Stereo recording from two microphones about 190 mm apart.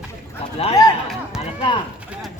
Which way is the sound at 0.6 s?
30° left (ahead or behind).